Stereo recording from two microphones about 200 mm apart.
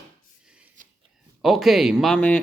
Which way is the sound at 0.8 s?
40° right (ahead or behind).